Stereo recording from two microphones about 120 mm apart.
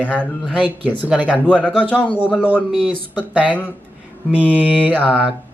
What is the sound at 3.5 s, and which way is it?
Speech, 15° left (ahead or behind).